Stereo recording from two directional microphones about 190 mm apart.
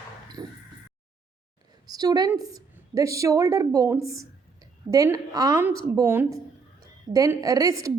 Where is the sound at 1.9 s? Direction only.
20° right (ahead or behind).